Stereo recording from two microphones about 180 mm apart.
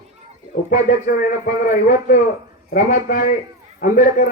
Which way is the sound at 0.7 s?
45° left (ahead or behind).